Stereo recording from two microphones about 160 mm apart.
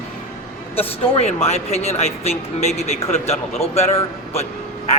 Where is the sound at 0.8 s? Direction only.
40° left (ahead or behind).